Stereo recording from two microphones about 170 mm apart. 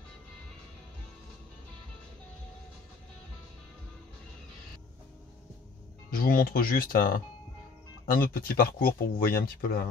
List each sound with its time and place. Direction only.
6.0 s speech: 60° left (ahead or behind)